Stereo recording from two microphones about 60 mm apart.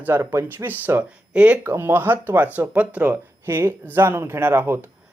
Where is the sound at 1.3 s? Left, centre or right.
Centre.